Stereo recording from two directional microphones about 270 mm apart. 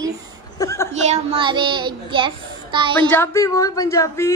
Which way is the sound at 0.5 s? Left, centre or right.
Centre.